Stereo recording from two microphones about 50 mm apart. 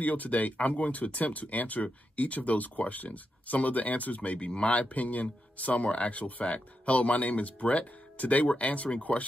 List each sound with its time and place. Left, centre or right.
0.0 s speech: left